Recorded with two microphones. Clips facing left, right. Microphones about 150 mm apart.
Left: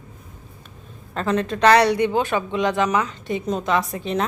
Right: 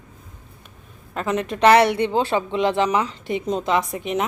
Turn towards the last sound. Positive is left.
turn(degrees=-15)  # may be behind; listen again after turning